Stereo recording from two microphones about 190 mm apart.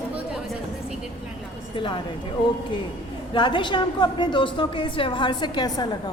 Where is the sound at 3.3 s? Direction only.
25° left (ahead or behind).